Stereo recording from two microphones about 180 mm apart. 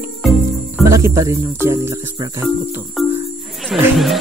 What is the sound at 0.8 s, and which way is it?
Speech, 15° right (ahead or behind).